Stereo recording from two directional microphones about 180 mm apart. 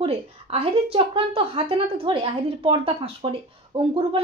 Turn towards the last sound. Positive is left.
turn(degrees=-30)  # may be behind; listen again after turning